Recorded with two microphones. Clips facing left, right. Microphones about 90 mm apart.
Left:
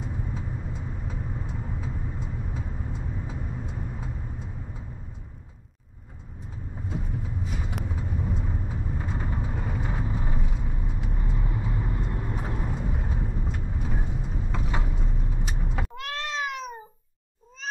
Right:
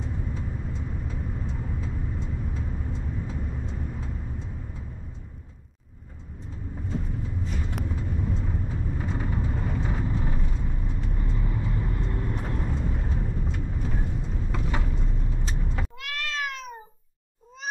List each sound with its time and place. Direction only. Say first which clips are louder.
0.0 s vehicle: right 1 dB; 5° left (ahead or behind)
6.9 s vehicle: right 1 dB; 5° left (ahead or behind)
16.0 s cat: left 2 dB; 30° left (ahead or behind)